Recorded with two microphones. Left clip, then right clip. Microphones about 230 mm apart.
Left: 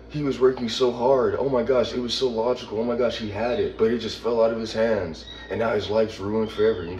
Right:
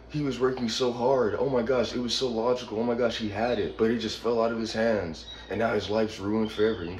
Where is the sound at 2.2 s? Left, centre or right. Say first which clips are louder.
Left 5 dB; centre.